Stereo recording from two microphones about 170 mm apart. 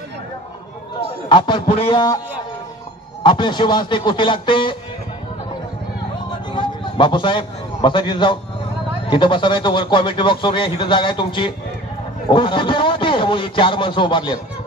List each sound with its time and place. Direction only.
1.3 s a man's voice: 30° left (ahead or behind)
6.5 s a man's voice: 25° left (ahead or behind)